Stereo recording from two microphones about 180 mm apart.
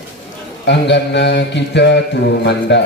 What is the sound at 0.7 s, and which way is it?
Mantra, 75° left (ahead or behind).